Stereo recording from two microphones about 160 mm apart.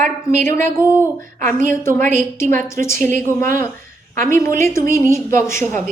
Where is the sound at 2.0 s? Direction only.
50° right (ahead or behind).